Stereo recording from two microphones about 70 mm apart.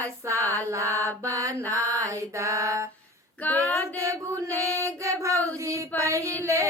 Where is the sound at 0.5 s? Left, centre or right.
Right.